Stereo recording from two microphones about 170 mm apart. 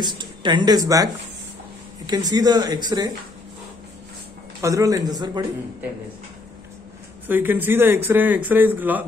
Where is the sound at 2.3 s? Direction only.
25° right (ahead or behind).